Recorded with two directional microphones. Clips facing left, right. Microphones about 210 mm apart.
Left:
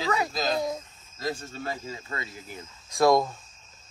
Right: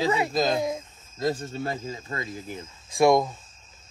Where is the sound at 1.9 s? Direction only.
30° right (ahead or behind).